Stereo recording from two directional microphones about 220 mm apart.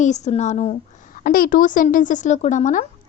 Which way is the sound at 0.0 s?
30° left (ahead or behind).